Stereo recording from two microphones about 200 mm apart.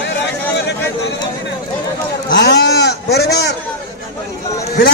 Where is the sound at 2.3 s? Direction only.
55° left (ahead or behind).